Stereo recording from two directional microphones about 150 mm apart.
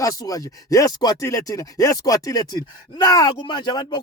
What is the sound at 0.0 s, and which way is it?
Speech, 20° left (ahead or behind).